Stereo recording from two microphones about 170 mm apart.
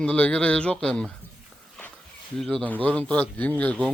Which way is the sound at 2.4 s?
5° left (ahead or behind).